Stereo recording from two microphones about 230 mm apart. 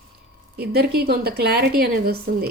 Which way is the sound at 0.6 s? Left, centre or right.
Right.